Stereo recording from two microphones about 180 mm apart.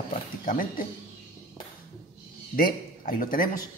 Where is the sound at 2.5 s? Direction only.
50° left (ahead or behind).